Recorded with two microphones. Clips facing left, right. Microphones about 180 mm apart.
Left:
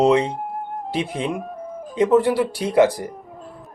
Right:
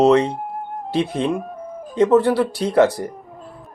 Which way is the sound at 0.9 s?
10° left (ahead or behind).